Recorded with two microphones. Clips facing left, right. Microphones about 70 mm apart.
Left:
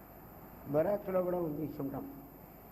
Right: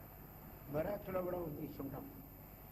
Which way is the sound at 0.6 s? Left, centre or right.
Left.